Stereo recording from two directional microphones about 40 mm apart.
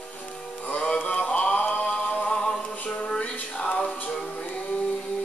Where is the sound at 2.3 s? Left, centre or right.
Centre.